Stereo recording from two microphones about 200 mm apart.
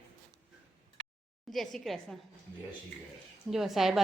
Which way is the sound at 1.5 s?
Centre (ahead or behind).